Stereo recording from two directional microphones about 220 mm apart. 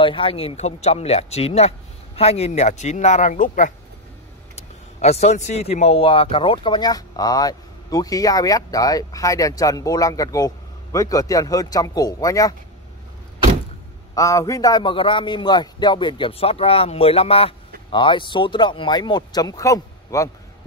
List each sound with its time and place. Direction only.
0.0 s speech: 25° left (ahead or behind)
14.1 s speech: 15° left (ahead or behind)